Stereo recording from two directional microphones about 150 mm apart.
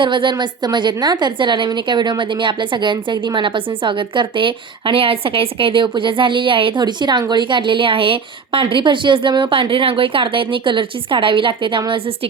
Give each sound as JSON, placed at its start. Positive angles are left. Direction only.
{"t": 0.0, "sound": "a woman's voice", "side_deg": -35}